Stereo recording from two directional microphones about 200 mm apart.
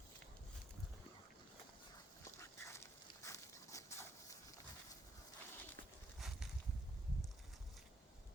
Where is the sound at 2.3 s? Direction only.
15° left (ahead or behind).